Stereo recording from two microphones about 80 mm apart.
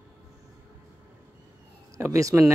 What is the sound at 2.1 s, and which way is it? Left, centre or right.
Speech, right.